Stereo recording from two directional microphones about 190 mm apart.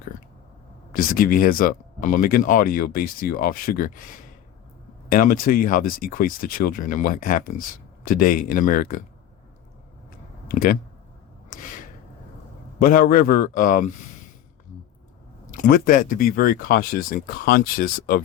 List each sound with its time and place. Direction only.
0.9 s speech: 50° left (ahead or behind)
5.1 s speech: 45° left (ahead or behind)
10.5 s speech: 50° left (ahead or behind)
12.8 s speech: 45° left (ahead or behind)
15.6 s speech: 45° left (ahead or behind)